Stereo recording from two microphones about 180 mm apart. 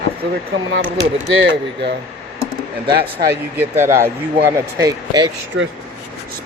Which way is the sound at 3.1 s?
10° right (ahead or behind).